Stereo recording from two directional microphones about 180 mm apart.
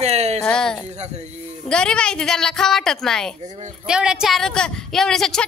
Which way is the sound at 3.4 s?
40° right (ahead or behind).